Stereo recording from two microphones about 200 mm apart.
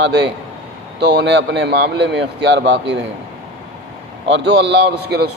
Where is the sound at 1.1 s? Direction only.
65° right (ahead or behind).